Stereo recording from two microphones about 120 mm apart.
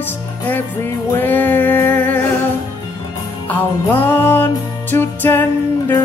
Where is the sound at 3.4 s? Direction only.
15° left (ahead or behind).